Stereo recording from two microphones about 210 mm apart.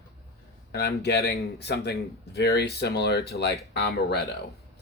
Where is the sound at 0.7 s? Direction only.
55° left (ahead or behind).